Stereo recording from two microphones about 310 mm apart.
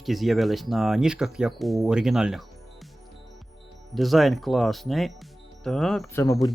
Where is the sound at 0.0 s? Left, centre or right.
Centre.